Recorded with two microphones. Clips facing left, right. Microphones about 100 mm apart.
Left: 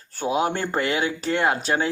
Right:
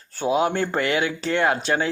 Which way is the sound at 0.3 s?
40° left (ahead or behind).